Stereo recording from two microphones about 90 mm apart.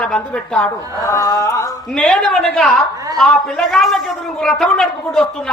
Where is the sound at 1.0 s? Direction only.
40° left (ahead or behind).